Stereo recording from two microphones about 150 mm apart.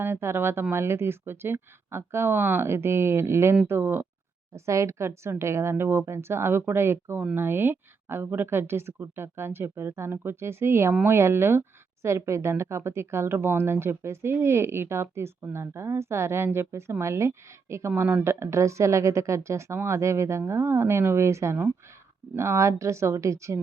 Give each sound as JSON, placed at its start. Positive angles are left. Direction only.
{"t": 0.0, "sound": "a woman's voice", "side_deg": -15}